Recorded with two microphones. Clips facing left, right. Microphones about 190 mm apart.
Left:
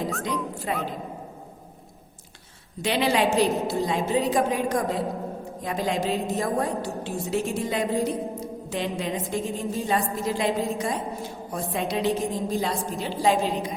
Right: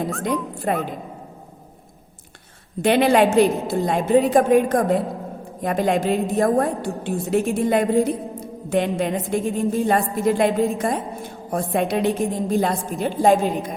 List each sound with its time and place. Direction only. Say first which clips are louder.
0.2 s speech: right 5 dB; 55° right (ahead or behind)
2.8 s a woman's voice: right 7 dB; 55° right (ahead or behind)